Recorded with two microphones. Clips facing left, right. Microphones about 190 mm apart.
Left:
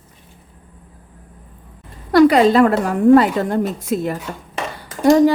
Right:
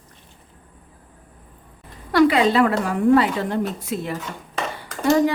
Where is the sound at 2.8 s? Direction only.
45° left (ahead or behind).